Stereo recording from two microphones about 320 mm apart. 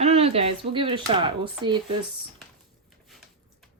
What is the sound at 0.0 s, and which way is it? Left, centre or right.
Speech, centre.